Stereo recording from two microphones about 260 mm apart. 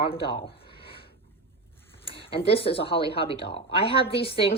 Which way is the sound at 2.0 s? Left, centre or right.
Left.